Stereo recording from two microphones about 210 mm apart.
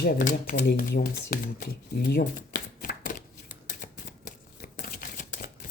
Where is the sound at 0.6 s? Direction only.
50° left (ahead or behind).